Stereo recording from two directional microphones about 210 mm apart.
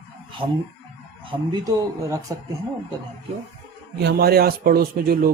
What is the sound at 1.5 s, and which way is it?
Speech, 15° right (ahead or behind).